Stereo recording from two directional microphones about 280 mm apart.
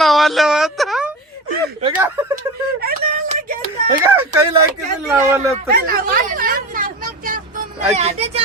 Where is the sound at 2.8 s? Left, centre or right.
Right.